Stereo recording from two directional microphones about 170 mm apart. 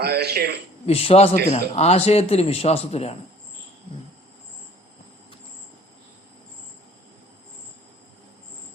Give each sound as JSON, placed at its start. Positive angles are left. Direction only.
{"t": 0.0, "sound": "a man's voice", "side_deg": -70}
{"t": 0.9, "sound": "a man's voice", "side_deg": 35}